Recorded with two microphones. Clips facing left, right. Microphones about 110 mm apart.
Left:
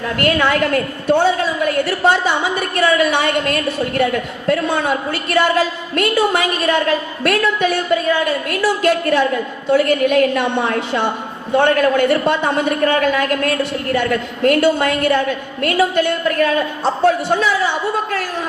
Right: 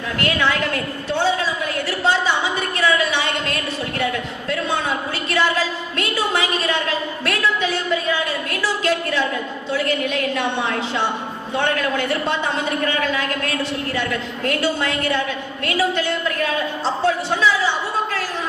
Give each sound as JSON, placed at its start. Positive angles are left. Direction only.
{"t": 0.2, "sound": "a woman's voice", "side_deg": 50}